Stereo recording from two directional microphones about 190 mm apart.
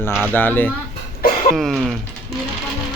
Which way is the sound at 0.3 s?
10° left (ahead or behind).